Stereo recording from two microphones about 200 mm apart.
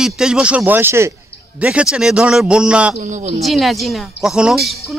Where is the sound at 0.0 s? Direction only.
5° right (ahead or behind).